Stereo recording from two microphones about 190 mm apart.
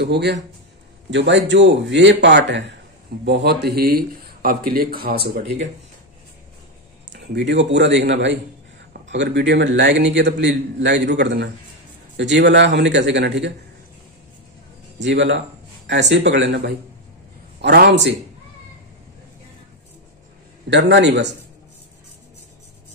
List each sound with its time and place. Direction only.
0.0 s a man's voice: 60° right (ahead or behind)
7.1 s a man's voice: 65° right (ahead or behind)
15.0 s a man's voice: 70° right (ahead or behind)
20.7 s a man's voice: 65° right (ahead or behind)